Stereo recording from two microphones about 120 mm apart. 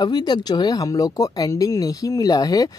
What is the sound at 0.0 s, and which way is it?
Speech, 35° left (ahead or behind).